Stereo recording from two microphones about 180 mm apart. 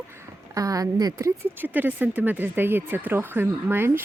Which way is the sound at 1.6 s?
10° right (ahead or behind).